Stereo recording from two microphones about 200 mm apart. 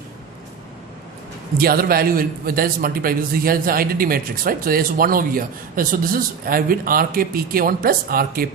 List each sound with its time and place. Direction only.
1.5 s a man's voice: 50° right (ahead or behind)